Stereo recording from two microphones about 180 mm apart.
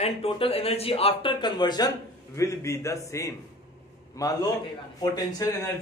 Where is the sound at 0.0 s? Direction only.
30° left (ahead or behind).